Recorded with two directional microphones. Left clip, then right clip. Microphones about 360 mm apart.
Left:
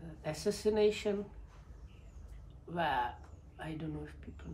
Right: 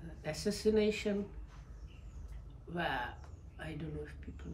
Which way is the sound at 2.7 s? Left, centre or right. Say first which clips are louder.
Left 4 dB; centre.